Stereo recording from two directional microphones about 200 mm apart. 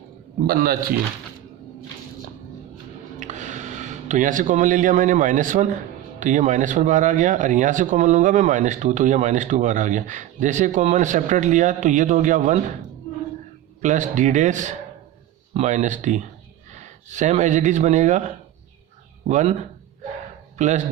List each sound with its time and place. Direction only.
0.4 s a man's voice: 45° right (ahead or behind)
3.2 s speech: 35° right (ahead or behind)
13.8 s speech: 35° right (ahead or behind)